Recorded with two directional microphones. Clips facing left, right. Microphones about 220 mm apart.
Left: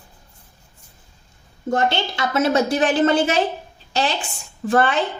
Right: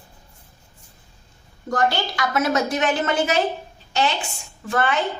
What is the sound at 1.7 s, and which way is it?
Speech, 25° left (ahead or behind).